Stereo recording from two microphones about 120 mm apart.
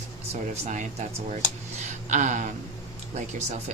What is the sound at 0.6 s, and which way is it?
Speech, 80° right.